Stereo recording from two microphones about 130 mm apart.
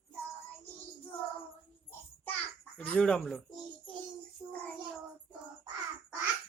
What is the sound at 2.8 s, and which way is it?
Speech, 10° left (ahead or behind).